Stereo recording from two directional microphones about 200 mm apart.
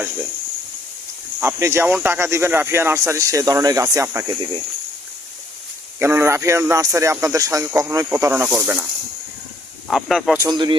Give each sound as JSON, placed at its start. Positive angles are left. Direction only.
{"t": 1.4, "sound": "speech", "side_deg": -10}
{"t": 6.0, "sound": "speech", "side_deg": -10}
{"t": 9.9, "sound": "speech", "side_deg": 0}
{"t": 10.3, "sound": "speech", "side_deg": -20}